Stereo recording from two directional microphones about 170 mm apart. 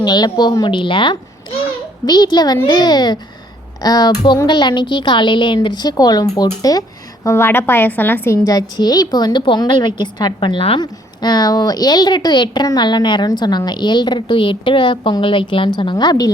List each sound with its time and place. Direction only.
0.0 s a woman's voice: 25° left (ahead or behind)